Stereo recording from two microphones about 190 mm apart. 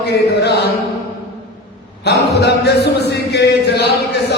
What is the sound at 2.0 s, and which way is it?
A man's voice, 60° left (ahead or behind).